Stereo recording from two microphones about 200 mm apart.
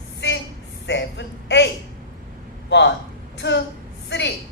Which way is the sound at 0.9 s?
60° left (ahead or behind).